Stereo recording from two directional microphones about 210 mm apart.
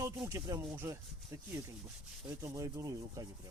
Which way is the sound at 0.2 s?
15° right (ahead or behind).